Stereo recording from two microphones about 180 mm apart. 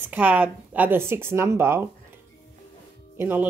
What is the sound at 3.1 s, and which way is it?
Speech, 10° right (ahead or behind).